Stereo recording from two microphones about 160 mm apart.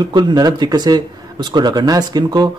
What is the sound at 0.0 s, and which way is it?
Speech, 25° right (ahead or behind).